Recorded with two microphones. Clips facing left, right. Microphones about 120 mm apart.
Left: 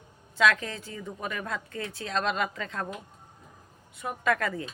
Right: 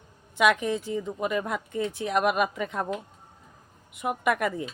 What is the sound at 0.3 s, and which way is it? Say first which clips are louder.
A woman's voice: right 3 dB; 15° right (ahead or behind).